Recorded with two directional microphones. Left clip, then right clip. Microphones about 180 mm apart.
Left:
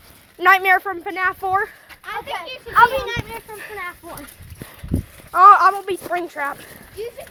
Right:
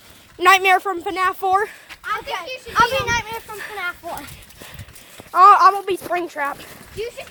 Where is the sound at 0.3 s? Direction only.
15° right (ahead or behind).